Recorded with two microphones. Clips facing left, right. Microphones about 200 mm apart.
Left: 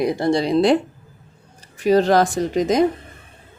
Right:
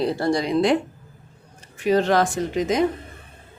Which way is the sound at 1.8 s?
35° left (ahead or behind).